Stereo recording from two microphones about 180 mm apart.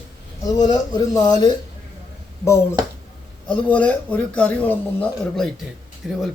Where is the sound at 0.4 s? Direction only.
20° left (ahead or behind).